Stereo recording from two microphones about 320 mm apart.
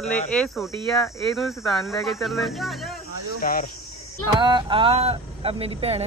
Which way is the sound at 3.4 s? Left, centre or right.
Left.